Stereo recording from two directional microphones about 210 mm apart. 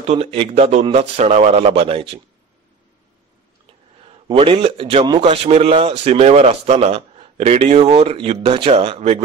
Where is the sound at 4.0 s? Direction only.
25° right (ahead or behind).